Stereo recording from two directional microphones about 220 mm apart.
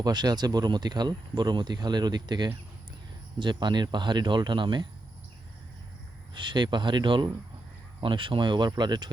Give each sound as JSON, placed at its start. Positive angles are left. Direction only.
{"t": 0.0, "sound": "speech", "side_deg": -20}
{"t": 6.3, "sound": "speech", "side_deg": -20}